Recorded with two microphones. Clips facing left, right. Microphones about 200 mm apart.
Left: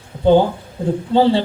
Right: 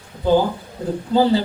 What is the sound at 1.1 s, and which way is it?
Speech, 30° left (ahead or behind).